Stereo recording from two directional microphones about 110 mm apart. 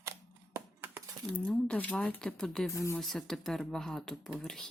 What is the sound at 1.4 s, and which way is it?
Speech, 10° left (ahead or behind).